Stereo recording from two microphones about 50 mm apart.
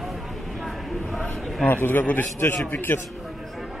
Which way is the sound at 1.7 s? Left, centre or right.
Left.